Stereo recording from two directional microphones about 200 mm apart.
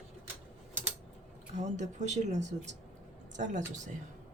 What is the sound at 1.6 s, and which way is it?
Speech, 35° right (ahead or behind).